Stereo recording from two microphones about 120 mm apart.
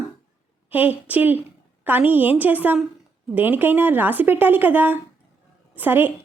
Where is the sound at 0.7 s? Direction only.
15° right (ahead or behind).